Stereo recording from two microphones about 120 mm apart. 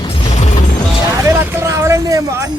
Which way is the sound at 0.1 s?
75° left (ahead or behind).